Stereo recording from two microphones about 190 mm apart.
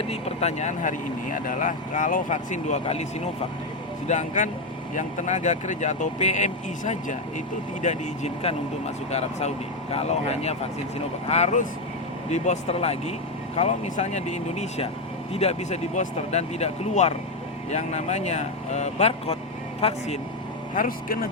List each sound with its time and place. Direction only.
0.0 s speech: 35° left (ahead or behind)
9.9 s speech: 35° left (ahead or behind)
20.7 s speech: 50° left (ahead or behind)